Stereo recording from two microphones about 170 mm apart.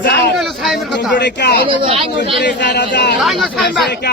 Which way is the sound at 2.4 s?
90° left.